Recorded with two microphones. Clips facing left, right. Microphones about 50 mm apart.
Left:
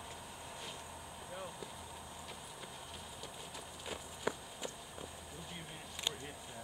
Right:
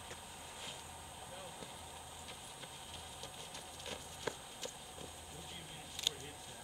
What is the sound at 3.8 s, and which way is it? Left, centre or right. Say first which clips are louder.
Run: left 4 dB; centre.